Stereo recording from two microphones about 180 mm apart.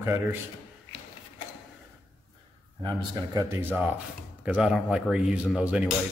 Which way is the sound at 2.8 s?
20° right (ahead or behind).